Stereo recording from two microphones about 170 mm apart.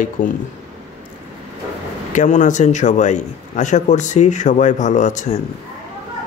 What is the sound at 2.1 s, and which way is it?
Speech, 45° left (ahead or behind).